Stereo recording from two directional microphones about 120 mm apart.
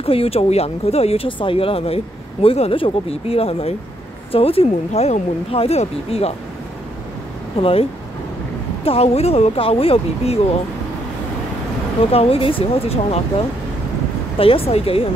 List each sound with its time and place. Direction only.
0.0 s speech: 50° left (ahead or behind)
7.6 s a woman's voice: 55° left (ahead or behind)
8.8 s speech: 55° left (ahead or behind)
12.1 s speech: 55° left (ahead or behind)
14.4 s a woman's voice: 50° left (ahead or behind)